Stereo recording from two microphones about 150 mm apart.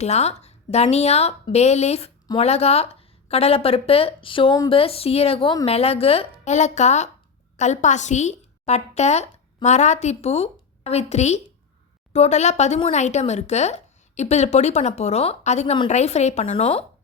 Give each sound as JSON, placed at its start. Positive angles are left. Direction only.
{"t": 0.0, "sound": "a woman's voice", "side_deg": 45}